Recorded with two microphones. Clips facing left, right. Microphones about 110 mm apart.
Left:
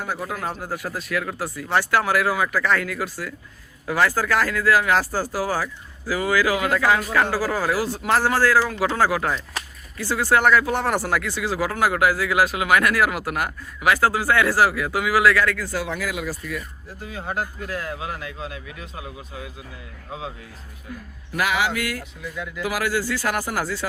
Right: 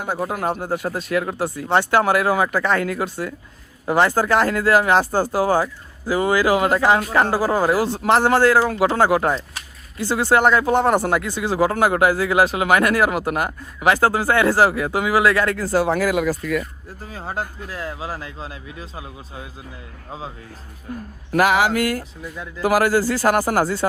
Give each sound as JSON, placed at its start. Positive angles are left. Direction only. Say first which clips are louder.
{"t": 0.1, "sound": "speech", "louder": "right 8 dB", "side_deg": -30}
{"t": 17.0, "sound": "speech", "louder": "even", "side_deg": -35}
{"t": 20.9, "sound": "speech", "louder": "right 9 dB", "side_deg": -45}